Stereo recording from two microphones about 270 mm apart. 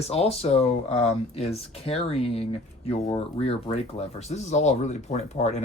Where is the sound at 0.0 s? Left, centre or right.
Left.